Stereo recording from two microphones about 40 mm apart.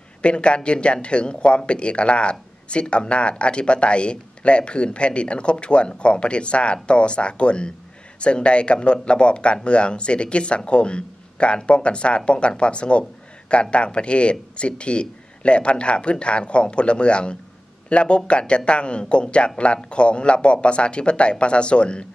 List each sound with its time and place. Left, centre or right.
0.2 s speech: left